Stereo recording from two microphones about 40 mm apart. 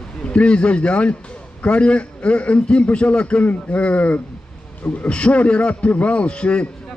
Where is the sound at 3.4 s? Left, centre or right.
Left.